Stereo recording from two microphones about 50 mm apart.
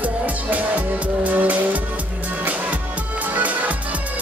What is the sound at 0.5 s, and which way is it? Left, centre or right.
Music, right.